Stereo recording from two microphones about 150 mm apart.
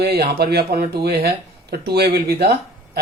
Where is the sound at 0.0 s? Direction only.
90° right.